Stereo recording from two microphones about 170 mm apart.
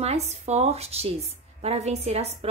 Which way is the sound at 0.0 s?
40° right (ahead or behind).